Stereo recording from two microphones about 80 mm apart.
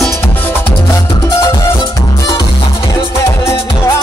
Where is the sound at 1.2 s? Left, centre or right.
Left.